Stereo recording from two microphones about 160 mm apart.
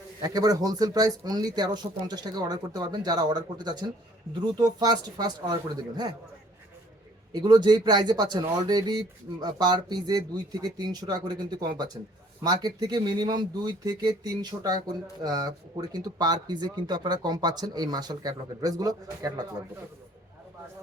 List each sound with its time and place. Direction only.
0.2 s speech: 25° right (ahead or behind)
7.3 s speech: 25° right (ahead or behind)